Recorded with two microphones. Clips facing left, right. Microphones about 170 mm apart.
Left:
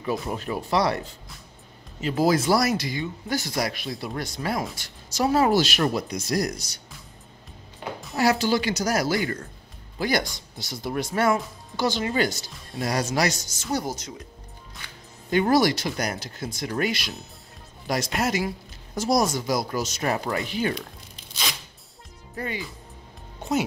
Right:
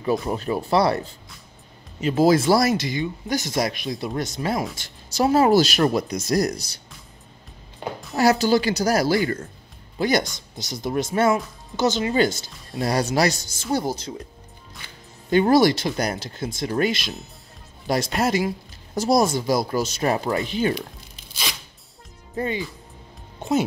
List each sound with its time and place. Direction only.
0.0 s speech: 35° right (ahead or behind)
8.2 s speech: 40° right (ahead or behind)
9.9 s speech: 20° right (ahead or behind)
15.3 s speech: 30° right (ahead or behind)
22.3 s speech: 25° right (ahead or behind)